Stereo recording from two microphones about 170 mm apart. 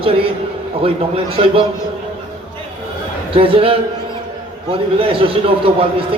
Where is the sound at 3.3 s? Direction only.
30° right (ahead or behind).